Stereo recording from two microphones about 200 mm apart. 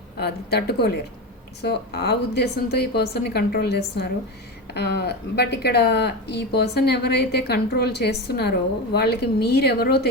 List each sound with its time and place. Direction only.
0.2 s a woman's voice: 55° left (ahead or behind)